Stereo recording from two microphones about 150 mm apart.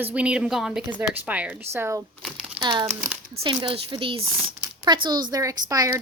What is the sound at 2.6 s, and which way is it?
A woman's voice, 30° right (ahead or behind).